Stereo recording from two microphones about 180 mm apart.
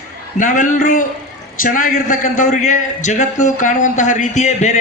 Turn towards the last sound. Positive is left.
turn(degrees=40)  # may be behind; listen again after turning